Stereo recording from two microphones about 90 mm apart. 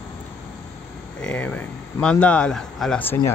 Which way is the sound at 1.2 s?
15° left (ahead or behind).